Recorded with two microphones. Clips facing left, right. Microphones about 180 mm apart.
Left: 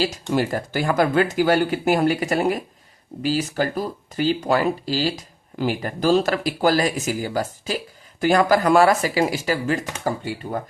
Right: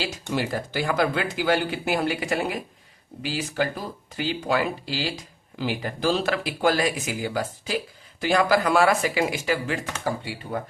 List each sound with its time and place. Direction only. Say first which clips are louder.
0.0 s speech: left 6 dB; 45° left (ahead or behind)